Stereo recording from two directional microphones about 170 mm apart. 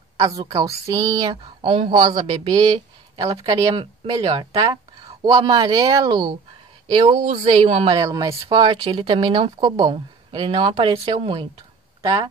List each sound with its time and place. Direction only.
0.2 s speech: 20° right (ahead or behind)